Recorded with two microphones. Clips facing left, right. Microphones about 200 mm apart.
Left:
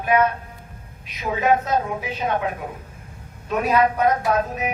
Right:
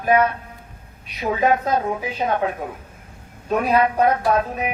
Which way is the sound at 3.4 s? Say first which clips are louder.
Right 1 dB; 35° right (ahead or behind).